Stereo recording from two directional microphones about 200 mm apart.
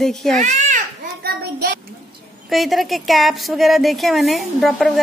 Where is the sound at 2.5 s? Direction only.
Centre (ahead or behind).